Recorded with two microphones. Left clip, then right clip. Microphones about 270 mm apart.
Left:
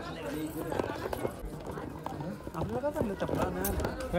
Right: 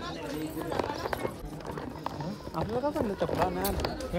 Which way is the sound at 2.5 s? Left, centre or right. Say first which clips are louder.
Right 3 dB; right.